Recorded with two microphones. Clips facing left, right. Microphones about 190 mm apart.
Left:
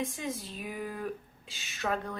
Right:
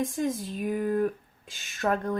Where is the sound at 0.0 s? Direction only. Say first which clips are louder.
Right 7 dB; 45° right (ahead or behind).